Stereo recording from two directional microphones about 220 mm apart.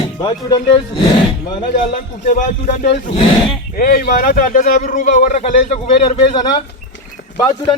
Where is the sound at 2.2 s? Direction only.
35° left (ahead or behind).